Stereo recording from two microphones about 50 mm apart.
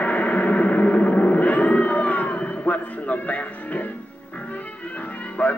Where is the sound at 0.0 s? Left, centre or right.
Left.